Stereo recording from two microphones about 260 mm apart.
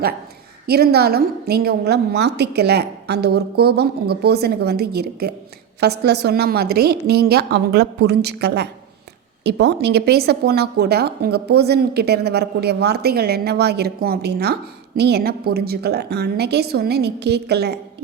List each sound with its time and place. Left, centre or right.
0.7 s speech: right